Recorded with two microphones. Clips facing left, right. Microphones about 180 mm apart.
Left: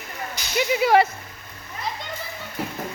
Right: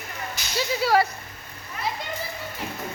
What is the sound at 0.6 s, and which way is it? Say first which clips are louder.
Speech: left 4 dB; 20° left (ahead or behind).